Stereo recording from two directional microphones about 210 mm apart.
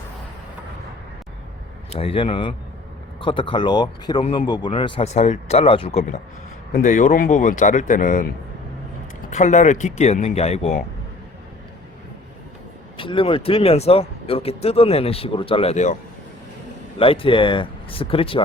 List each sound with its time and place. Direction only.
2.0 s speech: 25° left (ahead or behind)
9.3 s speech: 35° left (ahead or behind)
13.0 s speech: 25° left (ahead or behind)
17.0 s speech: 25° left (ahead or behind)